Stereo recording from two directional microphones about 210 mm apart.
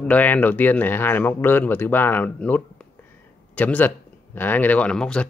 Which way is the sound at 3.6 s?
5° left (ahead or behind).